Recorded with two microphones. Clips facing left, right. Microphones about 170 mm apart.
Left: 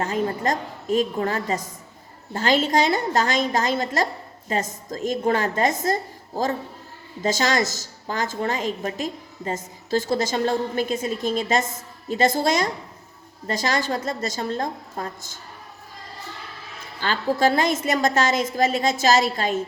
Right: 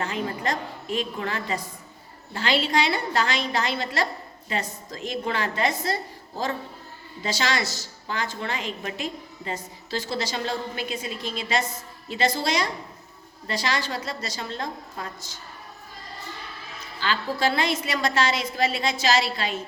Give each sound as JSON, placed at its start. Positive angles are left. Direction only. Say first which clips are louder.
{"t": 0.0, "sound": "a woman's voice", "louder": "left 4 dB", "side_deg": 45}
{"t": 17.0, "sound": "a woman's voice", "louder": "left 4 dB", "side_deg": 45}